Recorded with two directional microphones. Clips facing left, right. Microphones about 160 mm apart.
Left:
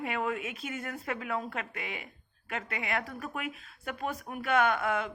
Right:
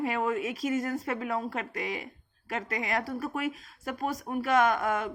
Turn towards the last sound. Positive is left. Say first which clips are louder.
# right 2 dB
turn(degrees=-45)  # may be behind; listen again after turning